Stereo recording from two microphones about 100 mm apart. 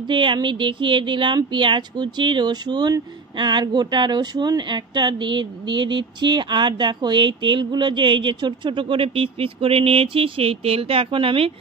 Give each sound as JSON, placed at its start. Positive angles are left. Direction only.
{"t": 0.1, "sound": "speech", "side_deg": -55}